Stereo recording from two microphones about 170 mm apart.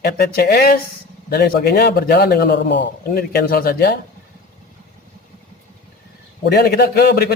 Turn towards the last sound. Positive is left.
turn(degrees=70)  # may be behind; listen again after turning